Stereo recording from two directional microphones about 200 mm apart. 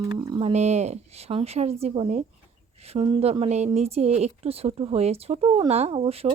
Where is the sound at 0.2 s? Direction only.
30° right (ahead or behind).